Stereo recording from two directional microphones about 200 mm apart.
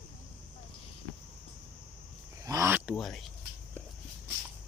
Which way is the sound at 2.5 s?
15° right (ahead or behind).